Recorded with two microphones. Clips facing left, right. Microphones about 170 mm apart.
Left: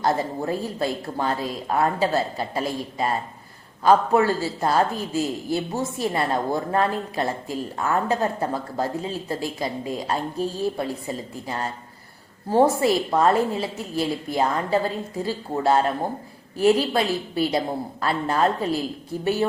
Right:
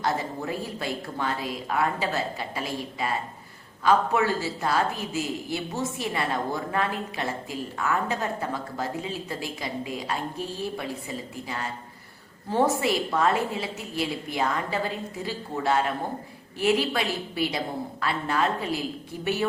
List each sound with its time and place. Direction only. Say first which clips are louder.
0.0 s a woman's voice: left 5 dB; 40° left (ahead or behind)